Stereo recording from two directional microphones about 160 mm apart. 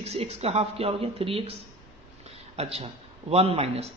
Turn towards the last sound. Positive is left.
turn(degrees=-40)  # may be behind; listen again after turning